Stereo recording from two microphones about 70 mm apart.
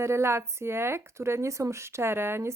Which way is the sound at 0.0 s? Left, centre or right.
Right.